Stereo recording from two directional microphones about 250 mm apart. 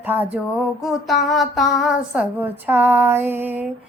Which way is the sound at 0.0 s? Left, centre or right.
Centre.